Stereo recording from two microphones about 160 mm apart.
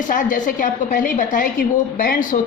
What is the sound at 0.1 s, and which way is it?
A man's voice, 55° left (ahead or behind).